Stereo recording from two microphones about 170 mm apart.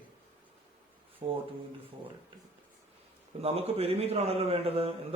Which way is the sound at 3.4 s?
35° right (ahead or behind).